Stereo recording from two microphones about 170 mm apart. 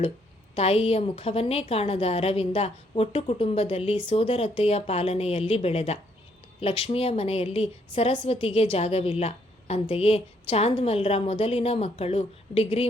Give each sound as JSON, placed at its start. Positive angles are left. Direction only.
{"t": 0.5, "sound": "a woman's voice", "side_deg": 35}